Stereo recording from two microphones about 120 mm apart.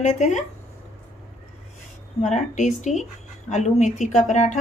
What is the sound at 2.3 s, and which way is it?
Speech, 85° left.